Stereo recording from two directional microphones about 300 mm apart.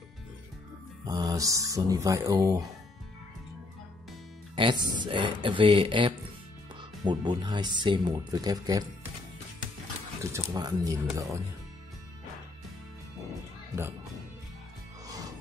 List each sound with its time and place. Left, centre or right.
1.0 s speech: centre
4.6 s speech: centre
10.3 s speech: centre